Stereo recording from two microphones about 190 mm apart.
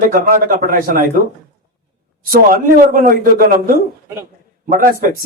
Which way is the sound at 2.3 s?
50° right (ahead or behind).